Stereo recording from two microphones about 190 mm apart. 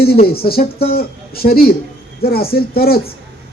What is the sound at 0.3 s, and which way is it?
A man's voice, 55° left (ahead or behind).